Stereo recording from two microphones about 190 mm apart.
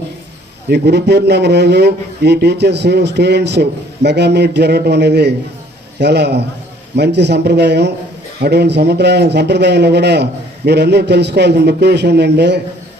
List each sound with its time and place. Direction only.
0.7 s a man's voice: 60° right (ahead or behind)